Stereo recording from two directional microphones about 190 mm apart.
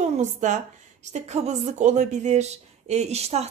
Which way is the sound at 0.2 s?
40° right (ahead or behind).